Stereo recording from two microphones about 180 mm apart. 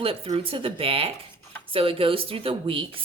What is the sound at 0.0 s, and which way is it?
A woman's voice, 30° right (ahead or behind).